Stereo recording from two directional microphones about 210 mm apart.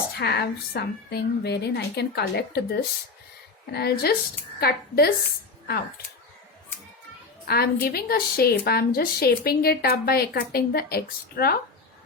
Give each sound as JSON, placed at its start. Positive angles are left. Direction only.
{"t": 0.2, "sound": "a woman's voice", "side_deg": 50}
{"t": 7.4, "sound": "a woman's voice", "side_deg": 45}